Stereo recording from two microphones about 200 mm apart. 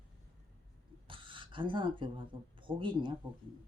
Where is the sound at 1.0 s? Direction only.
25° right (ahead or behind).